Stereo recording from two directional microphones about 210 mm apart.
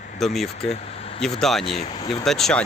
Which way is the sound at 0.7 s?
30° left (ahead or behind).